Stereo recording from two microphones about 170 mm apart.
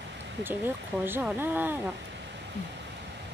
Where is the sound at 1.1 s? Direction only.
10° right (ahead or behind).